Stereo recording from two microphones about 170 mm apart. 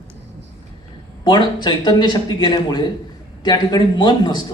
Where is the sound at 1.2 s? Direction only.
25° left (ahead or behind).